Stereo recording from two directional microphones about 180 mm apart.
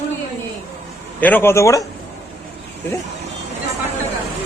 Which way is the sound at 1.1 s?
10° left (ahead or behind).